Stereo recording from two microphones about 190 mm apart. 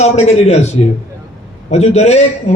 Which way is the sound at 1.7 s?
35° left (ahead or behind).